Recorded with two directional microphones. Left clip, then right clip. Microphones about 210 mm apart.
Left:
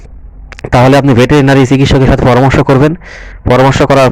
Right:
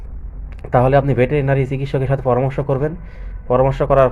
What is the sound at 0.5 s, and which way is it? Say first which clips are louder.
A man's voice: left 7 dB; 50° left (ahead or behind).